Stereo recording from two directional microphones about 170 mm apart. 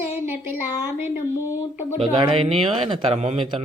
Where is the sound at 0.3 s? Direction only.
10° right (ahead or behind).